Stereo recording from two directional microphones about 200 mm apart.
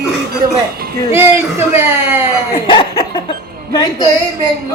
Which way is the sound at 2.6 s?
25° left (ahead or behind).